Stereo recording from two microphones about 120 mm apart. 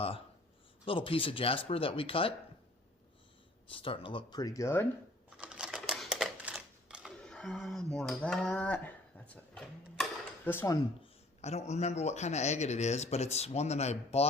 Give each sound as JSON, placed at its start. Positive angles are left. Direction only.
{"t": 0.9, "sound": "speech", "side_deg": 50}
{"t": 3.7, "sound": "speech", "side_deg": 45}
{"t": 5.4, "sound": "typewriter", "side_deg": -10}
{"t": 6.3, "sound": "a sound", "side_deg": -10}
{"t": 7.3, "sound": "speech", "side_deg": 5}
{"t": 10.4, "sound": "dishes", "side_deg": 15}
{"t": 11.3, "sound": "a man's voice", "side_deg": 65}